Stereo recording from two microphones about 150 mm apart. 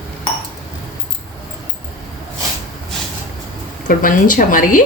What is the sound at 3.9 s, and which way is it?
Speech, 65° left (ahead or behind).